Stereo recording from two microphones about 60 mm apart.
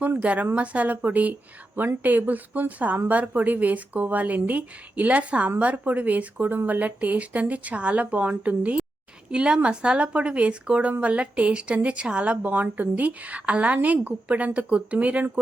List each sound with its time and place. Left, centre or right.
0.2 s a woman's voice: right